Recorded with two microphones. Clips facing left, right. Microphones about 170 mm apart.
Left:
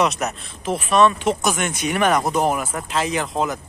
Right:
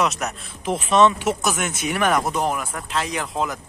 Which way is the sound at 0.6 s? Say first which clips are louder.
Even; 20° right (ahead or behind).